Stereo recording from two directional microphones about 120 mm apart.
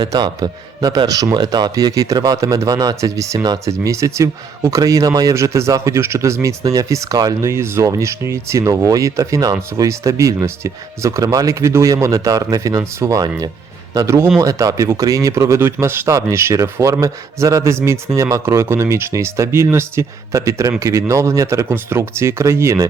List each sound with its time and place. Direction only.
0.0 s a man's voice: 30° right (ahead or behind)